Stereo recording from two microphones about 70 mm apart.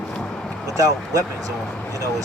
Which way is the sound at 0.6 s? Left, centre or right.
Right.